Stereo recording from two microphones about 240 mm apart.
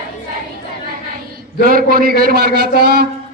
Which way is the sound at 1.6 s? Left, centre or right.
Right.